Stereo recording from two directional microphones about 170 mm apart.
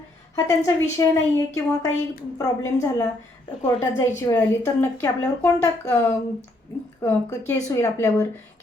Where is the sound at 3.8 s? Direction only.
20° left (ahead or behind).